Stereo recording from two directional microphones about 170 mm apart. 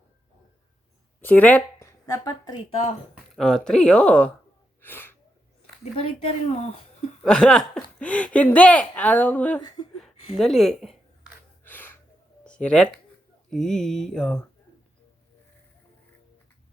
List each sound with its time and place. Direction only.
1.2 s speech: 10° left (ahead or behind)
3.3 s speech: 5° left (ahead or behind)
4.8 s gasp: 10° left (ahead or behind)
5.8 s speech: 40° left (ahead or behind)
7.2 s speech: 5° left (ahead or behind)
9.6 s speech: 25° left (ahead or behind)
10.3 s speech: centre (ahead or behind)
11.6 s gasp: 10° left (ahead or behind)
12.5 s speech: 5° left (ahead or behind)